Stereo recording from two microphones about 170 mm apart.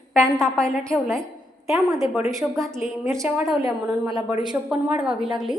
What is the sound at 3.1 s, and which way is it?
A woman's voice, 10° right (ahead or behind).